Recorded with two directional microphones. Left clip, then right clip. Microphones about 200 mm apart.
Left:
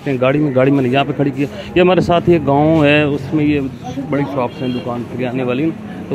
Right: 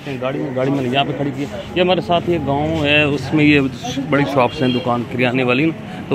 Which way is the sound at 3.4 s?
Centre (ahead or behind).